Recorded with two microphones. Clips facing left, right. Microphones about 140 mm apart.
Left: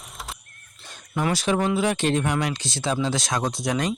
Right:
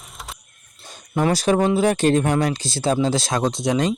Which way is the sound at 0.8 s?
40° right (ahead or behind).